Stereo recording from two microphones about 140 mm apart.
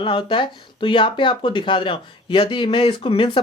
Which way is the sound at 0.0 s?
35° left (ahead or behind).